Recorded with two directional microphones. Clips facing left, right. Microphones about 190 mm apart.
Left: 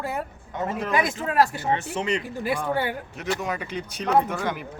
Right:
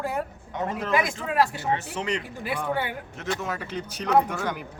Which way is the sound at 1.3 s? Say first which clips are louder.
Left 2 dB; 45° left (ahead or behind).